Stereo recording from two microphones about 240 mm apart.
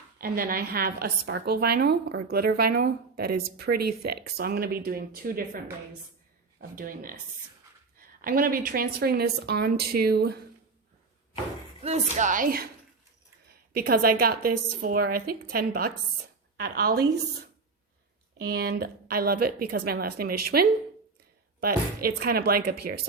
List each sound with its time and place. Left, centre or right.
0.2 s a woman's voice: right
6.6 s a woman's voice: right
8.2 s a woman's voice: right
11.8 s a woman's voice: right
13.5 s a sound: right
14.2 s a woman's voice: right
18.3 s a woman's voice: right
19.5 s speech: right
19.8 s a woman's voice: right
21.6 s a woman's voice: right